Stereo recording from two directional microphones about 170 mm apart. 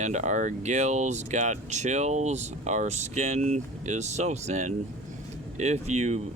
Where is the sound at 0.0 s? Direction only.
45° right (ahead or behind).